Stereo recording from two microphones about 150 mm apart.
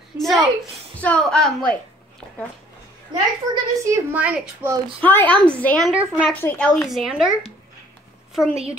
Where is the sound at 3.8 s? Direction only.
15° right (ahead or behind).